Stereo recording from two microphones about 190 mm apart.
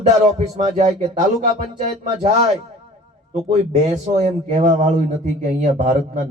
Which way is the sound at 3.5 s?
40° right (ahead or behind).